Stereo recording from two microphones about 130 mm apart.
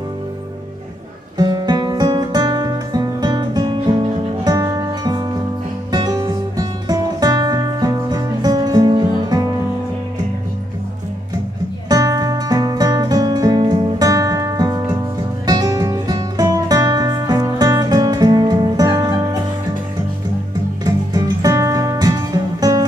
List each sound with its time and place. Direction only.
1.4 s music: 30° right (ahead or behind)
11.9 s music: 30° right (ahead or behind)
20.8 s music: 30° right (ahead or behind)